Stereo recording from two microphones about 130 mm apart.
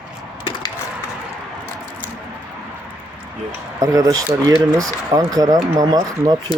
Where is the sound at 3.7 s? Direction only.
25° right (ahead or behind).